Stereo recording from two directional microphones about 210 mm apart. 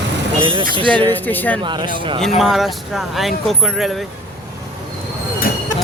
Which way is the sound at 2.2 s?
Centre (ahead or behind).